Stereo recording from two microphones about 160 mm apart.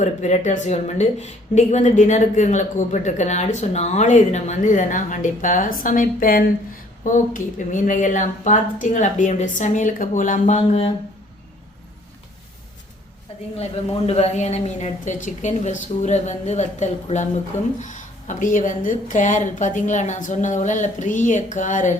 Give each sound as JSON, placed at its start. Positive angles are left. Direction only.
{"t": 0.0, "sound": "a woman's voice", "side_deg": 45}
{"t": 13.6, "sound": "a woman's voice", "side_deg": 40}